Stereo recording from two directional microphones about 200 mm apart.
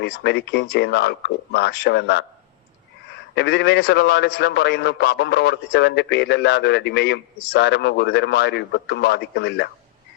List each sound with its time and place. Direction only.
0.0 s a man's voice: 55° left (ahead or behind)
3.3 s a man's voice: 55° left (ahead or behind)